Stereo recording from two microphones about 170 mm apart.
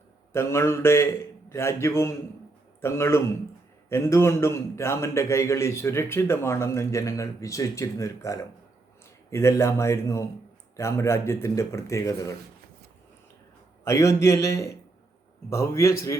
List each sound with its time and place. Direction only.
0.3 s a man's voice: 15° left (ahead or behind)
13.8 s a man's voice: 15° left (ahead or behind)